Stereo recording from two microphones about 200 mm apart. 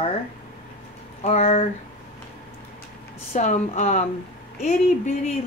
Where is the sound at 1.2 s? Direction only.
30° left (ahead or behind).